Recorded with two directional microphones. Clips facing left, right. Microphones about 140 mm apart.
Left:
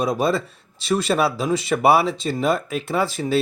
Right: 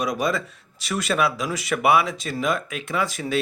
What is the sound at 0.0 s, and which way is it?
Speech, 30° left (ahead or behind).